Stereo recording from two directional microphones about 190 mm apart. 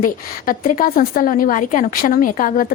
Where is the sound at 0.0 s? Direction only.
45° left (ahead or behind).